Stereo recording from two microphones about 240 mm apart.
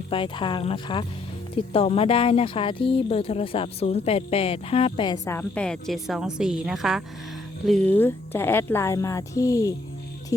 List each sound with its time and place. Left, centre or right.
0.1 s a woman's voice: left